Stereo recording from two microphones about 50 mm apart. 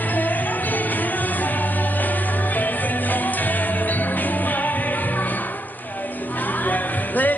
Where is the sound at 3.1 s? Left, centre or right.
Left.